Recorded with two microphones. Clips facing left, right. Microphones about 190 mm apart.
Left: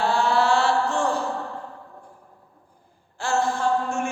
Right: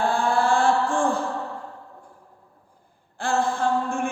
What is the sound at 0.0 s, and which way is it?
Mantra, 50° right (ahead or behind).